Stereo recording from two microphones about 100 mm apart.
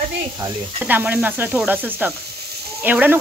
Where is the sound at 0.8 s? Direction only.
15° right (ahead or behind).